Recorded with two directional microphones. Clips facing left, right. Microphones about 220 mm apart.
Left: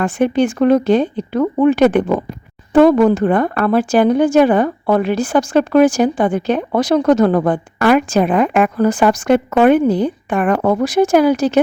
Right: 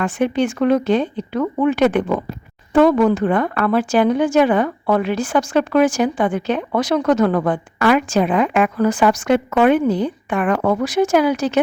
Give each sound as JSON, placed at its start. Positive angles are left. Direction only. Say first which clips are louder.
{"t": 0.0, "sound": "speech", "louder": "left 3 dB", "side_deg": 35}
{"t": 8.9, "sound": "speech", "louder": "left 3 dB", "side_deg": 35}